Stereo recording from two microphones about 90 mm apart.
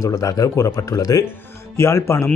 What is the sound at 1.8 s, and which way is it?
Speech, 30° left (ahead or behind).